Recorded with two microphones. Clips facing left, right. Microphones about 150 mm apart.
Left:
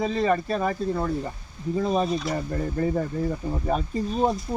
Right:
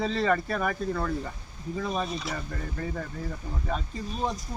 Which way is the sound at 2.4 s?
30° left (ahead or behind).